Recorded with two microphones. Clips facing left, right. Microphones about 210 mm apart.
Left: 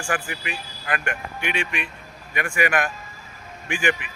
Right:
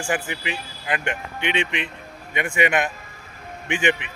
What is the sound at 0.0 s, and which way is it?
Speech, 20° right (ahead or behind).